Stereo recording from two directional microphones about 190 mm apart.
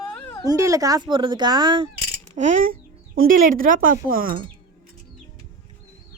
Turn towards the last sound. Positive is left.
turn(degrees=-50)  # may be behind; listen again after turning